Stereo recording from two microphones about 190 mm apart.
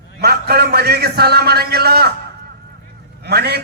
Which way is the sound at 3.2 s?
60° right (ahead or behind).